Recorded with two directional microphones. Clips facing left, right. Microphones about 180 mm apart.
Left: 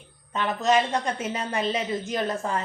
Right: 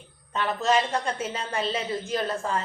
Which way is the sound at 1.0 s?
15° left (ahead or behind).